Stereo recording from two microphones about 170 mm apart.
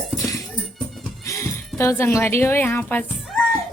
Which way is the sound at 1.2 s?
15° left (ahead or behind).